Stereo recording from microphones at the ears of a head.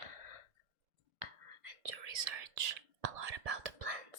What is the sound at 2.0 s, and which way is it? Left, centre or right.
Whispering, right.